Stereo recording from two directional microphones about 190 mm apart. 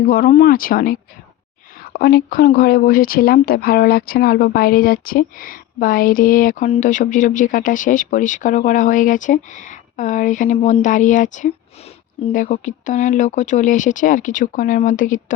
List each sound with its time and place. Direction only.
0.3 s speech: 45° left (ahead or behind)